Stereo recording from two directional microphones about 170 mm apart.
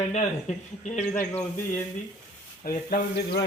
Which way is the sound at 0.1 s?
40° left (ahead or behind).